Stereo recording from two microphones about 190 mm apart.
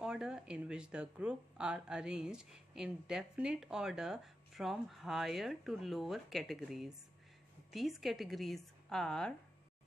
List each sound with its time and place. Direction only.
0.0 s speech: 5° right (ahead or behind)